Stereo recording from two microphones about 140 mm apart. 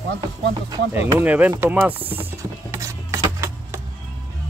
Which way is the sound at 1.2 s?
10° right (ahead or behind).